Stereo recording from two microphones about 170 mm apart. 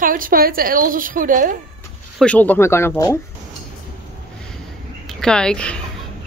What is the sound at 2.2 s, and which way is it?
Speech, 10° left (ahead or behind).